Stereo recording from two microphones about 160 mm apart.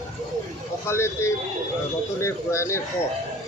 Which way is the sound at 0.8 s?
15° left (ahead or behind).